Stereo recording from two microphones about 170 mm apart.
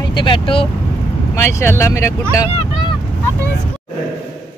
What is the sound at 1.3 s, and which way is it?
Speech, 15° left (ahead or behind).